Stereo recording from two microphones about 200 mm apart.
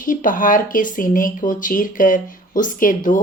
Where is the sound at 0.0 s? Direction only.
45° left (ahead or behind).